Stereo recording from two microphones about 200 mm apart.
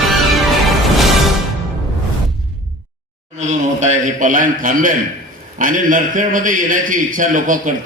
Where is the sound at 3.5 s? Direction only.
35° right (ahead or behind).